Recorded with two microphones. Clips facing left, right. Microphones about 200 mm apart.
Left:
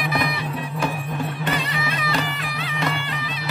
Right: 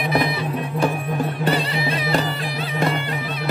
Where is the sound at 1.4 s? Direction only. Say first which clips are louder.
Right 4 dB; 35° right (ahead or behind).